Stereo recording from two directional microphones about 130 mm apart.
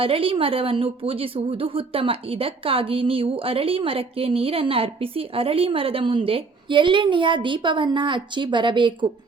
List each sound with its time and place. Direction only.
0.0 s a woman's voice: 45° right (ahead or behind)